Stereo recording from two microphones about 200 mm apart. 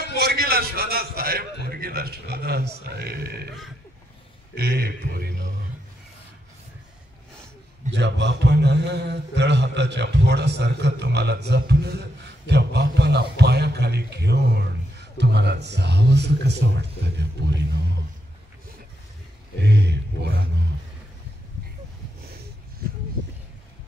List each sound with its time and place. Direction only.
0.2 s a man's voice: 50° right (ahead or behind)
4.6 s speech: 50° right (ahead or behind)
7.9 s a man's voice: 60° right (ahead or behind)
19.6 s a man's voice: 60° right (ahead or behind)